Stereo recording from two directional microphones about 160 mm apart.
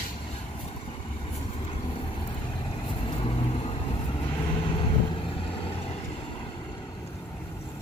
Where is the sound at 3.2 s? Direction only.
35° left (ahead or behind).